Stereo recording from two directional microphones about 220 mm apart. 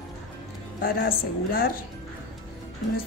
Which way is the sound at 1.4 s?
40° left (ahead or behind).